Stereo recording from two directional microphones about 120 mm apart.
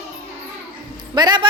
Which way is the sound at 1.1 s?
35° right (ahead or behind).